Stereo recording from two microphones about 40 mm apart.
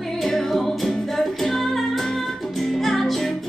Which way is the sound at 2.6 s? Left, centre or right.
Centre.